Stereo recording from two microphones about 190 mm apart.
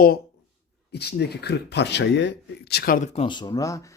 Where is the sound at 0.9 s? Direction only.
60° left (ahead or behind).